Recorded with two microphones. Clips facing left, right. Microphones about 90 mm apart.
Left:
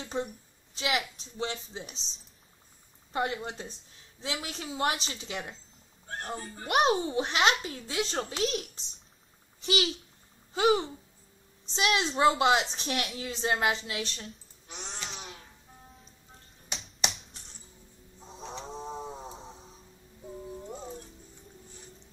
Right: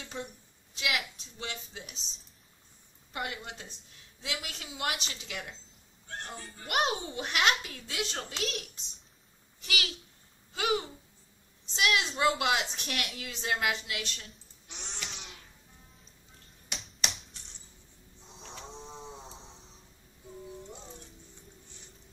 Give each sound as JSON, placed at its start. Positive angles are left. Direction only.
{"t": 0.0, "sound": "a woman's voice", "side_deg": 35}
{"t": 9.7, "sound": "a child's voice", "side_deg": 25}
{"t": 14.7, "sound": "cat", "side_deg": 40}
{"t": 15.0, "sound": "music", "side_deg": 40}
{"t": 16.7, "sound": "finger snapping", "side_deg": 0}
{"t": 18.4, "sound": "chicken", "side_deg": 20}
{"t": 18.7, "sound": "a sound", "side_deg": 40}
{"t": 20.6, "sound": "music", "side_deg": 45}